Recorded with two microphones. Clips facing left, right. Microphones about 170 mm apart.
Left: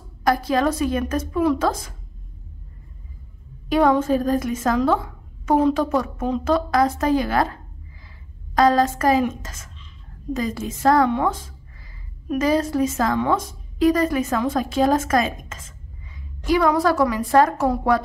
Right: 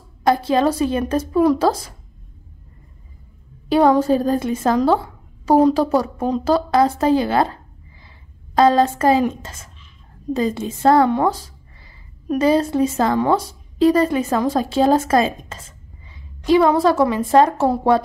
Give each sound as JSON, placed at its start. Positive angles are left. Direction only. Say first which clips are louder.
{"t": 0.2, "sound": "a woman's voice", "louder": "right 3 dB", "side_deg": -25}
{"t": 3.6, "sound": "a woman's voice", "louder": "right 3 dB", "side_deg": -30}
{"t": 8.5, "sound": "a woman's voice", "louder": "right 3 dB", "side_deg": -25}